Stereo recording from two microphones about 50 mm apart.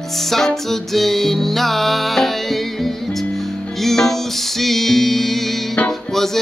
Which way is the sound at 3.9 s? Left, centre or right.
Centre.